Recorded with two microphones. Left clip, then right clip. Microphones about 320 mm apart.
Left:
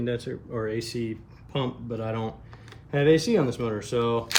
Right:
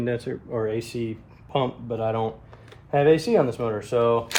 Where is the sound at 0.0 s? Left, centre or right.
Centre.